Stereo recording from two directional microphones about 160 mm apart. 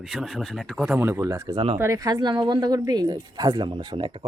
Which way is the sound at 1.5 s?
35° right (ahead or behind).